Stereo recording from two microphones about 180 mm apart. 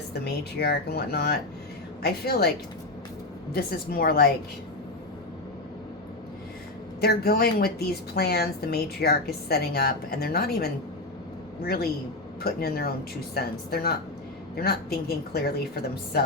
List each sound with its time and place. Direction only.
0.6 s a woman's voice: 65° left (ahead or behind)
3.5 s a woman's voice: 55° left (ahead or behind)
7.0 s a woman's voice: 60° left (ahead or behind)